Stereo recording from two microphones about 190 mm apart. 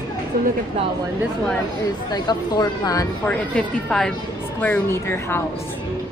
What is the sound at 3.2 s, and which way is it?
A woman's voice, 5° left (ahead or behind).